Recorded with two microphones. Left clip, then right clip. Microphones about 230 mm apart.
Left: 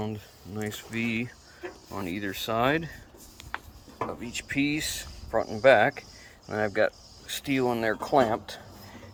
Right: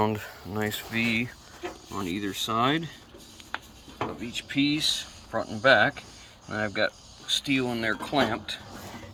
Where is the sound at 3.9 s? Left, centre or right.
Centre.